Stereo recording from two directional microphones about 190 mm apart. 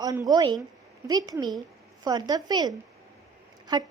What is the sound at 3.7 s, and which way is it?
Speech, 20° right (ahead or behind).